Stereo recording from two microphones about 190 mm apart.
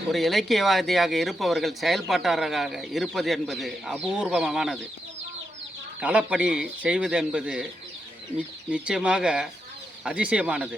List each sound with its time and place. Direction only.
0.1 s speech: centre (ahead or behind)
6.0 s speech: 5° right (ahead or behind)